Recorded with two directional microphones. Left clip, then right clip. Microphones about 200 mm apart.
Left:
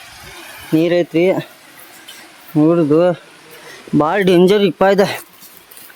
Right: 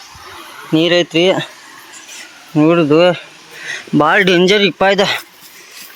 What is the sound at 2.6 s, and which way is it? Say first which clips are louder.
Speech: right 2 dB; centre (ahead or behind).